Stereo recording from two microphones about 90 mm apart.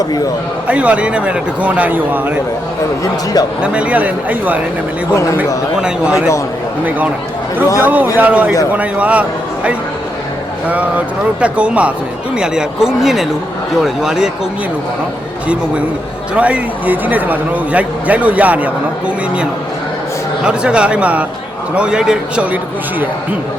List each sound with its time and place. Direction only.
0.0 s a man's voice: 45° left (ahead or behind)
0.7 s a man's voice: 15° right (ahead or behind)
3.6 s a man's voice: 15° right (ahead or behind)
5.7 s a man's voice: 10° right (ahead or behind)
7.8 s a man's voice: 20° right (ahead or behind)
10.7 s a man's voice: 15° right (ahead or behind)
16.3 s a man's voice: 15° right (ahead or behind)